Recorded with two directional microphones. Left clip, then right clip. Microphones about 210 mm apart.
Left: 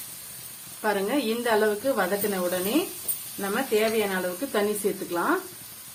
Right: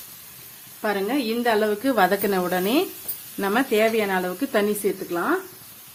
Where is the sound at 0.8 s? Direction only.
25° right (ahead or behind).